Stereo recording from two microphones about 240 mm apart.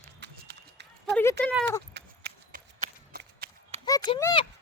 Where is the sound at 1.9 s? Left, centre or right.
Right.